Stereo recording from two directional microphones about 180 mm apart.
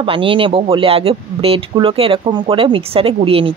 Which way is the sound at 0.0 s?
30° right (ahead or behind).